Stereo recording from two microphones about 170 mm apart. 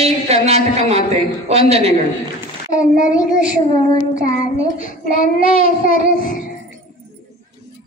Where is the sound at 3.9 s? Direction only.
50° left (ahead or behind).